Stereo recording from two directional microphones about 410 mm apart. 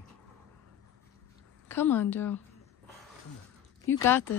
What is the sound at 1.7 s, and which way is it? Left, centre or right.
Speech, centre.